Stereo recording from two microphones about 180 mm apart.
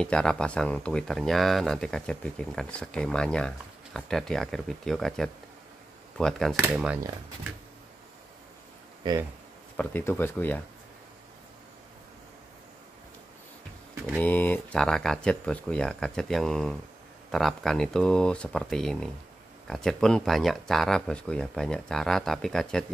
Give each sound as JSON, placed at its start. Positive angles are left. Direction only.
{"t": 0.0, "sound": "speech", "side_deg": 5}
{"t": 9.0, "sound": "speech", "side_deg": -25}
{"t": 9.8, "sound": "speech", "side_deg": 10}
{"t": 14.0, "sound": "speech", "side_deg": 5}